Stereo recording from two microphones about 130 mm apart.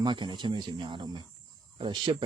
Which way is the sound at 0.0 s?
35° right (ahead or behind).